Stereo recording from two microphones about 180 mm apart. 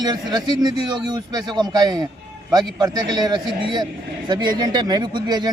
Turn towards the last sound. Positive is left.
turn(degrees=-25)  # may be behind; listen again after turning